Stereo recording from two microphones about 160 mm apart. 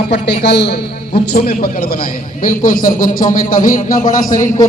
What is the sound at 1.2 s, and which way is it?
Speech, 75° left (ahead or behind).